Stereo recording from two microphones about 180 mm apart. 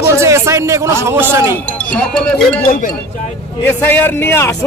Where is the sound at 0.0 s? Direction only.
15° right (ahead or behind).